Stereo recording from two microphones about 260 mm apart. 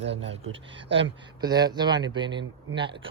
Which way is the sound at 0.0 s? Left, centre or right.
Right.